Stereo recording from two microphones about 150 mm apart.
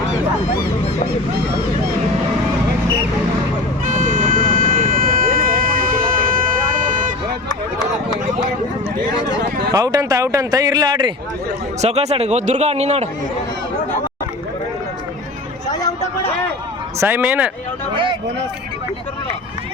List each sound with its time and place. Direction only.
3.8 s vehicle: 60° right (ahead or behind)
9.7 s speech: 25° right (ahead or behind)
11.8 s speech: 45° right (ahead or behind)
15.6 s hubbub: 25° left (ahead or behind)
17.0 s speech: 15° right (ahead or behind)